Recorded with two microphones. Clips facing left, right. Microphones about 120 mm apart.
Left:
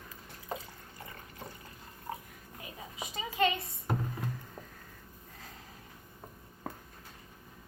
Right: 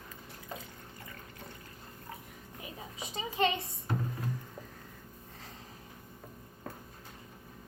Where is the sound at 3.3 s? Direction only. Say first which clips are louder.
Even; 30° right (ahead or behind).